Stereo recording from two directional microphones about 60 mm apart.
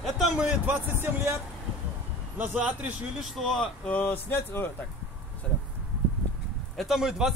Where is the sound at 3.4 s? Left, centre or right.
Centre.